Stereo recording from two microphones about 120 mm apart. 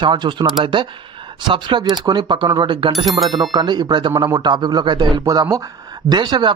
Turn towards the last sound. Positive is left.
turn(degrees=-40)  # may be behind; listen again after turning